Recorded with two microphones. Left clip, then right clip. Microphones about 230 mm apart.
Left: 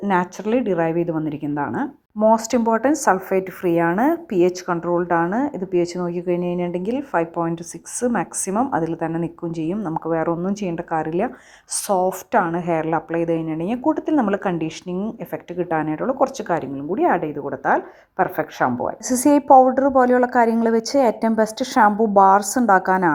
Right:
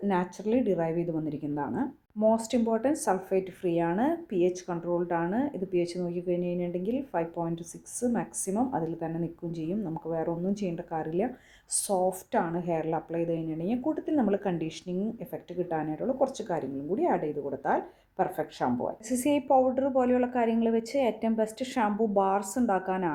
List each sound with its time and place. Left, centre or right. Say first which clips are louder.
0.0 s a woman's voice: left 9 dB; centre
2.3 s speech: left 10 dB; centre
2.6 s a woman's voice: left 11 dB; centre
19.5 s a woman's voice: left 13 dB; centre
20.0 s a woman's voice: left 11 dB; centre